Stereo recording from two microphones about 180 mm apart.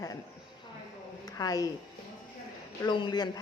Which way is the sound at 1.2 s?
20° left (ahead or behind).